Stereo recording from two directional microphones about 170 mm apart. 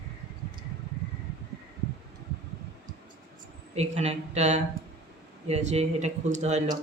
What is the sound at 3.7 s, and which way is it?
A man's voice, 40° right (ahead or behind).